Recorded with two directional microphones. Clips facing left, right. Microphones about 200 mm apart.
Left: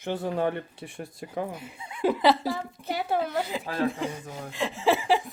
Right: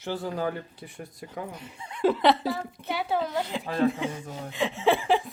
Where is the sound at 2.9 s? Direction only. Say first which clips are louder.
Left 1 dB; 50° left (ahead or behind).